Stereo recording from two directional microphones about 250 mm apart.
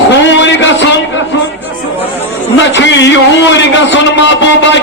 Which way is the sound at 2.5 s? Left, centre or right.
Left.